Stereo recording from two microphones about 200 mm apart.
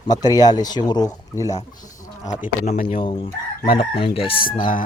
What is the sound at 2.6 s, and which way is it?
Speech, 40° left (ahead or behind).